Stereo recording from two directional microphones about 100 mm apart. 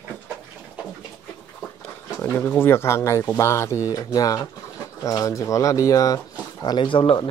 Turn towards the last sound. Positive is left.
turn(degrees=55)  # may be behind; listen again after turning